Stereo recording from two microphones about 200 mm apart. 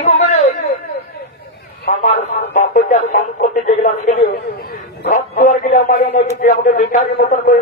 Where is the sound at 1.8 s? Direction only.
40° left (ahead or behind).